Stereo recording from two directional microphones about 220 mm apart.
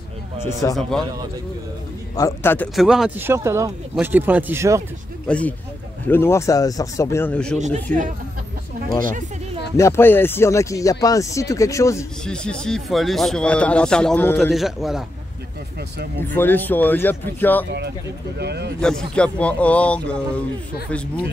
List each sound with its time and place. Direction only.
0.5 s speech: 15° left (ahead or behind)
0.7 s speech: centre (ahead or behind)
2.1 s speech: 10° left (ahead or behind); by 4.8 s 15° right (ahead or behind)
5.3 s speech: 5° left (ahead or behind)
7.5 s speech: 30° right (ahead or behind)
9.8 s speech: 10° left (ahead or behind)
12.3 s speech: 5° left (ahead or behind)
16.3 s speech: 10° left (ahead or behind)
18.4 s speech: 50° right (ahead or behind)
18.8 s speech: 5° left (ahead or behind)